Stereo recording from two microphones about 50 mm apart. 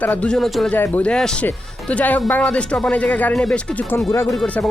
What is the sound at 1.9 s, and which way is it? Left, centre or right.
A woman's voice, left.